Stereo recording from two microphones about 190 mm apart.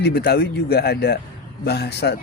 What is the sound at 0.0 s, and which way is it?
A man's voice, 55° left (ahead or behind).